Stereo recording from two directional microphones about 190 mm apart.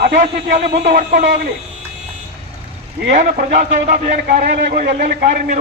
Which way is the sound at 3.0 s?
55° right (ahead or behind).